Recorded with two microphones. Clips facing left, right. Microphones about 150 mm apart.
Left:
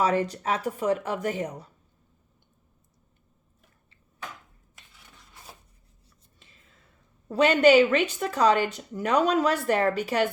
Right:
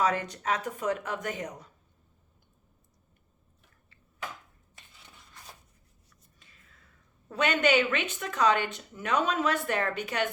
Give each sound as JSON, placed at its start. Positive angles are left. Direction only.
{"t": 0.0, "sound": "speech", "side_deg": 30}
{"t": 6.4, "sound": "whispering", "side_deg": 25}
{"t": 7.3, "sound": "speech", "side_deg": 30}